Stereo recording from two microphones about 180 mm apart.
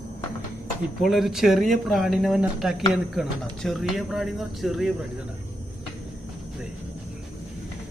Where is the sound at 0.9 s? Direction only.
Centre (ahead or behind).